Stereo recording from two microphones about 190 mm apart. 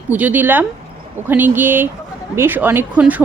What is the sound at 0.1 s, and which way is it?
Speech, 10° right (ahead or behind).